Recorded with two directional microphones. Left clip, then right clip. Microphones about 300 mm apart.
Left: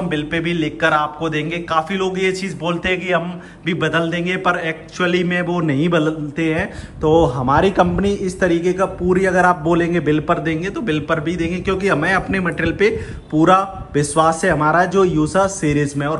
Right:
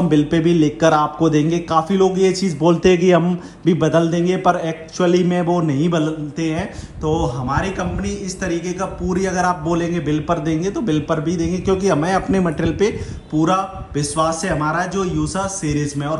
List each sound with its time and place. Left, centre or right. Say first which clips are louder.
0.1 s speech: right 6 dB; centre